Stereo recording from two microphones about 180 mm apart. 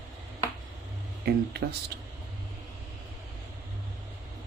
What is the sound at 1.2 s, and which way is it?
Speech, 60° right (ahead or behind).